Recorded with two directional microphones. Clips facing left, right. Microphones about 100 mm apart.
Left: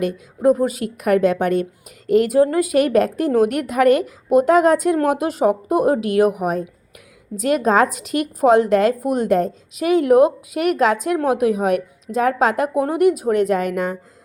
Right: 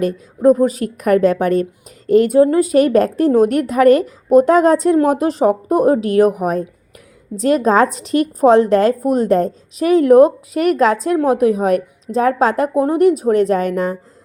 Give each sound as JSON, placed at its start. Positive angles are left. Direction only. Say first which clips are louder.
{"t": 0.0, "sound": "a woman's voice", "louder": "right 4 dB", "side_deg": -35}